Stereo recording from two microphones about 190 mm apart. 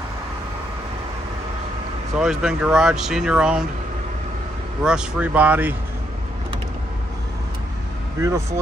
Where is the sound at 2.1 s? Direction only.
5° right (ahead or behind).